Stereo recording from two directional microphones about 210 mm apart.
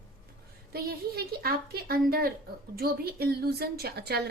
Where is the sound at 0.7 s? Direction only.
45° right (ahead or behind).